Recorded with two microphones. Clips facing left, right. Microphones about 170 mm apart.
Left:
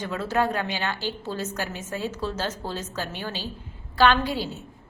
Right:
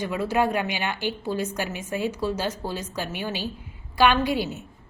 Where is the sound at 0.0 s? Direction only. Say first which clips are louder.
Right 2 dB; 10° right (ahead or behind).